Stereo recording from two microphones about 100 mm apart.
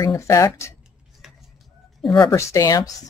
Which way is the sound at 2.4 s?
35° left (ahead or behind).